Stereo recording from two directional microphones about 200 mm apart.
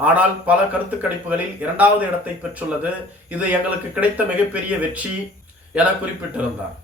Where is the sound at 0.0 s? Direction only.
5° right (ahead or behind).